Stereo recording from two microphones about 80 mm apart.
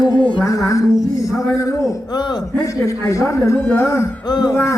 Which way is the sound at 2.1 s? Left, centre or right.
Left.